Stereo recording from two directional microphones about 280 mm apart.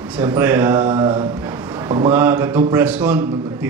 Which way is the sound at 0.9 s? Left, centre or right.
Centre.